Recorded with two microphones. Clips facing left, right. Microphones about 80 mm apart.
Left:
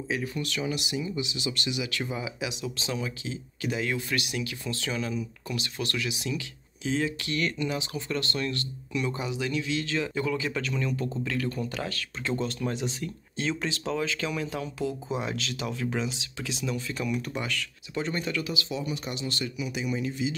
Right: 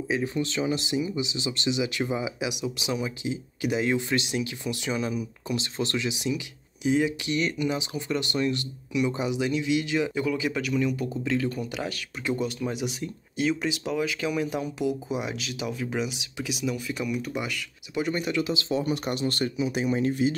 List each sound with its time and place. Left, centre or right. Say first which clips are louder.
0.1 s speech: right 4 dB; right
18.8 s speech: right 6 dB; right